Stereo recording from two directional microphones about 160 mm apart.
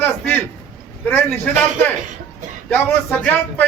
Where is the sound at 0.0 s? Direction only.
10° left (ahead or behind).